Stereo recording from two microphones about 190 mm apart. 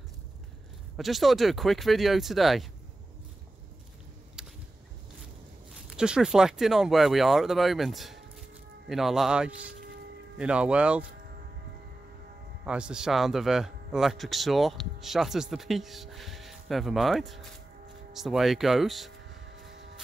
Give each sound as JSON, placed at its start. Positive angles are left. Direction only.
{"t": 0.9, "sound": "speech", "side_deg": 0}
{"t": 4.4, "sound": "a sound", "side_deg": -5}
{"t": 5.9, "sound": "speech", "side_deg": -5}
{"t": 12.6, "sound": "speech", "side_deg": -5}
{"t": 19.7, "sound": "vehicle", "side_deg": -70}